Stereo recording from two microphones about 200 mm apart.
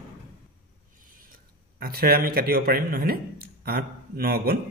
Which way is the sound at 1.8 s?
50° right (ahead or behind).